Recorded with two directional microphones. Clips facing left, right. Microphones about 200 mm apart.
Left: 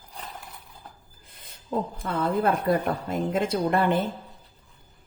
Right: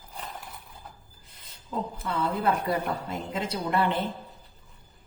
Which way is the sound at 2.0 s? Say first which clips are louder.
Left 2 dB; 50° left (ahead or behind).